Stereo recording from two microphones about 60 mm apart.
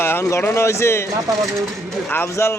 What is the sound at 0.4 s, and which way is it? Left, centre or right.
Speech, left.